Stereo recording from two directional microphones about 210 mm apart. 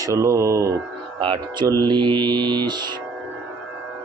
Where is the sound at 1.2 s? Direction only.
20° right (ahead or behind).